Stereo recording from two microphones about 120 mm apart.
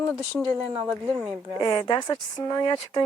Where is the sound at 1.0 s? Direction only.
20° right (ahead or behind).